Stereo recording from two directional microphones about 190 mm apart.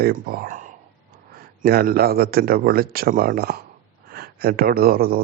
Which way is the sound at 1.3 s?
55° right (ahead or behind).